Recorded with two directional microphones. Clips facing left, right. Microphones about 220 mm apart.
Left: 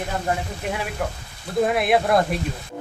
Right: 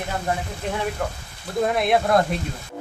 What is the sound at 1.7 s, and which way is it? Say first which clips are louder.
Speech: left 1 dB; 5° left (ahead or behind).